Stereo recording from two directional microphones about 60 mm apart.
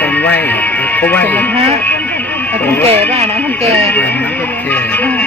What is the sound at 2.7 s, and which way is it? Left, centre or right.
Speech, left.